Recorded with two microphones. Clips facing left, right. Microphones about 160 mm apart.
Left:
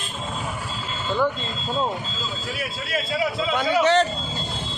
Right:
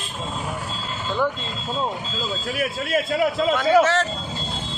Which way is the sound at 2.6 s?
50° right (ahead or behind).